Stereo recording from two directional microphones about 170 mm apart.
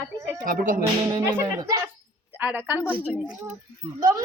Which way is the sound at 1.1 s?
20° right (ahead or behind).